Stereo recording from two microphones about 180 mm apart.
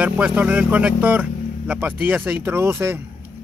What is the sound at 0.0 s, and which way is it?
Speech, 10° right (ahead or behind).